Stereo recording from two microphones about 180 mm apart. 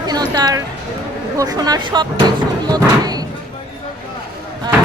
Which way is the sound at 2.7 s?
20° right (ahead or behind).